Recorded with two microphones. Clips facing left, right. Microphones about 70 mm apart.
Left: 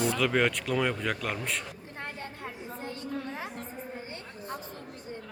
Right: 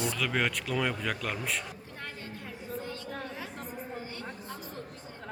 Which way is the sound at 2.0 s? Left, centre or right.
Left.